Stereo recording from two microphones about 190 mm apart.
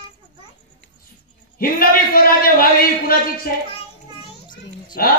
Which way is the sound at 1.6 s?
50° left (ahead or behind).